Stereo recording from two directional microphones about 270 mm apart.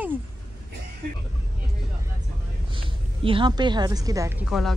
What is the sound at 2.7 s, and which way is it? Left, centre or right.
A woman's voice, centre.